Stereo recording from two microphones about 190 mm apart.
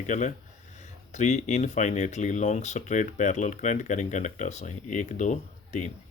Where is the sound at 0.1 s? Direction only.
40° left (ahead or behind).